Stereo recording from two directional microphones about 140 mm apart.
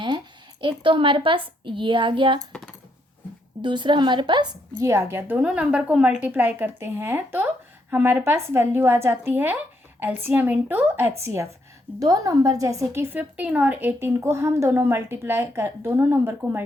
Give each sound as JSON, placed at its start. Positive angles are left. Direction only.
{"t": 0.6, "sound": "a woman's voice", "side_deg": -35}
{"t": 3.6, "sound": "a woman's voice", "side_deg": -35}